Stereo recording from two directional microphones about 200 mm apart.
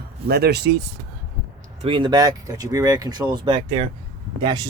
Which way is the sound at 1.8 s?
25° right (ahead or behind).